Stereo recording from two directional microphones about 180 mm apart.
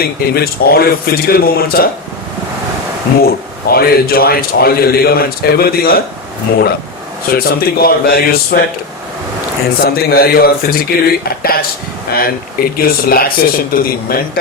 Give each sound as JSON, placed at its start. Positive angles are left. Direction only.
{"t": 0.0, "sound": "a man's voice", "side_deg": 60}
{"t": 3.2, "sound": "a man's voice", "side_deg": 60}
{"t": 7.3, "sound": "a man's voice", "side_deg": 55}
{"t": 9.8, "sound": "a man's voice", "side_deg": 55}